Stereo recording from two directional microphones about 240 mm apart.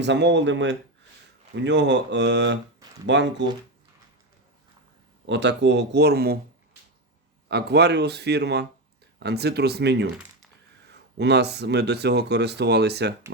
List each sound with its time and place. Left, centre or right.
0.0 s speech: right
5.2 s speech: right
7.4 s speech: right